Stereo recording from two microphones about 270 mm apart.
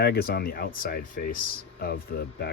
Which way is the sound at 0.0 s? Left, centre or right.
Left.